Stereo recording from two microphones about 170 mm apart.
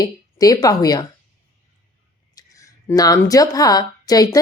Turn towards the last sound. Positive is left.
turn(degrees=20)  # may be behind; listen again after turning